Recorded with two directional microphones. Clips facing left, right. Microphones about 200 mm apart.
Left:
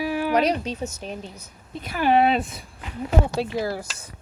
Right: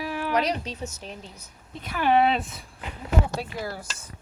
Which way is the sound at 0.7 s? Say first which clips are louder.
Left 5 dB; 45° left (ahead or behind).